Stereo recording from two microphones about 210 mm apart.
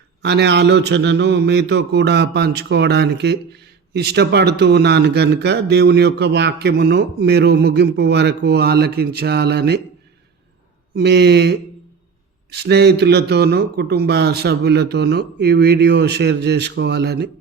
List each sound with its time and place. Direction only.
0.2 s a man's voice: 55° right (ahead or behind)
10.9 s a man's voice: 50° right (ahead or behind)